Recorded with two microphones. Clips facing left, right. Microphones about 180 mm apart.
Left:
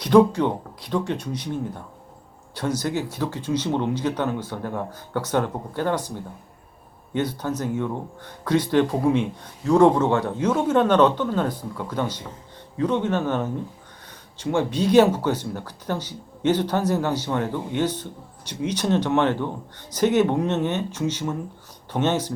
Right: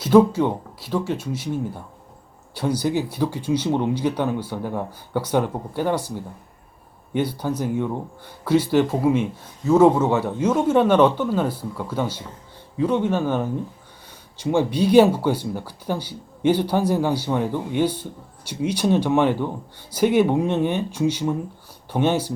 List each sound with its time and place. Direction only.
0.0 s speech: 5° right (ahead or behind)